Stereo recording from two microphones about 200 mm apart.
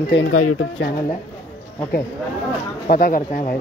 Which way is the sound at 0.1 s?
80° left.